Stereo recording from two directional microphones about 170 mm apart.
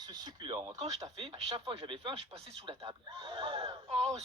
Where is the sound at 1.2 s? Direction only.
35° right (ahead or behind).